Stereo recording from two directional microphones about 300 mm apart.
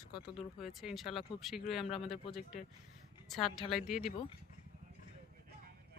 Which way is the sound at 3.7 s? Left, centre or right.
Centre.